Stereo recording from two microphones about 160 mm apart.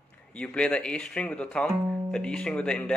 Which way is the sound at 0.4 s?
5° left (ahead or behind).